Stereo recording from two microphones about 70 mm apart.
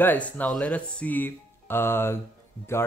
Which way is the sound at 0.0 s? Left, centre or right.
Left.